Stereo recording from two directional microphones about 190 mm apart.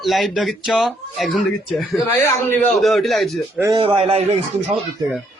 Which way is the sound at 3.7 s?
30° right (ahead or behind).